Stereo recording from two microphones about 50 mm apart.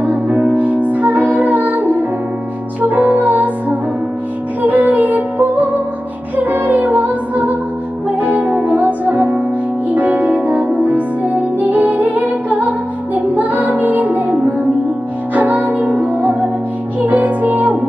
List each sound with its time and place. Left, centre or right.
0.0 s music: right
4.6 s music: right
15.3 s music: right